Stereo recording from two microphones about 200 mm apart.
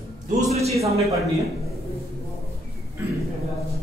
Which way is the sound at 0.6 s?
15° right (ahead or behind).